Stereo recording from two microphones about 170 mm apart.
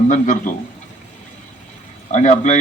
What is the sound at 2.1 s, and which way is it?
Speech, 45° left (ahead or behind).